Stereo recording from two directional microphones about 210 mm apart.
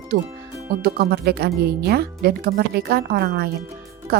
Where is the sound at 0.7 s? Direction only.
45° right (ahead or behind).